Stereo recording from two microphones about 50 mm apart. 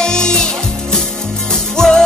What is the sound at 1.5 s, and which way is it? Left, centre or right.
Music, centre.